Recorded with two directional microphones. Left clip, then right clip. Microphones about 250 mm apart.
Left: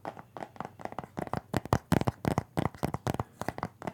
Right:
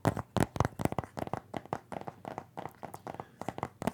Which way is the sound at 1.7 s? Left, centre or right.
Left.